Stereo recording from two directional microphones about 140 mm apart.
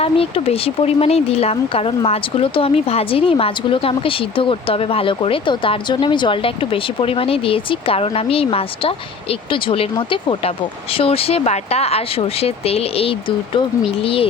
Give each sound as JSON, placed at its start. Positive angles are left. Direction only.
{"t": 0.0, "sound": "a woman's voice", "side_deg": 45}